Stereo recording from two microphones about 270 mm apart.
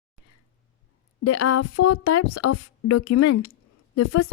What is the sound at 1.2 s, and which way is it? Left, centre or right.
A woman's voice, left.